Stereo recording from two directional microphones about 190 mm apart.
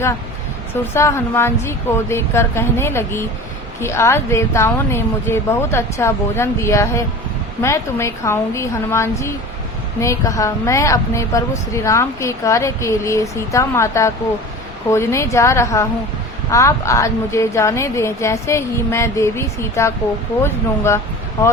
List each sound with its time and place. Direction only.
0.9 s a woman's voice: 15° left (ahead or behind)